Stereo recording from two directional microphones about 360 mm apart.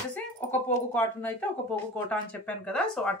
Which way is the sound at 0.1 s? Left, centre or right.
Centre.